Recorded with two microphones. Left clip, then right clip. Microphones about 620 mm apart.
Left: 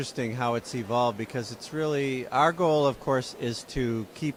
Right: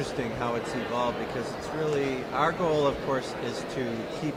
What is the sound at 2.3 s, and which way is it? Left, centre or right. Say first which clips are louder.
Speech: left 4 dB; left.